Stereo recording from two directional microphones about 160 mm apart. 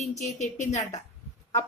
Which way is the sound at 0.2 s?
45° left (ahead or behind).